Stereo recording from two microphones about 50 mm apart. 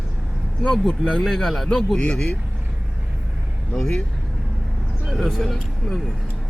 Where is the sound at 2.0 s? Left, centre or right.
Centre.